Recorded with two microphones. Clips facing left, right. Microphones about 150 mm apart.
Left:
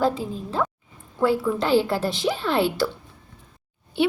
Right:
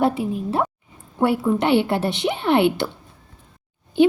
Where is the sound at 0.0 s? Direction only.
75° right (ahead or behind).